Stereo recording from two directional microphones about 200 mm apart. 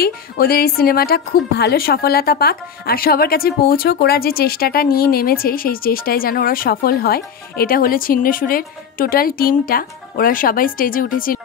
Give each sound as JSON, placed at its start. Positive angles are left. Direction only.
{"t": 0.0, "sound": "a woman's voice", "side_deg": 50}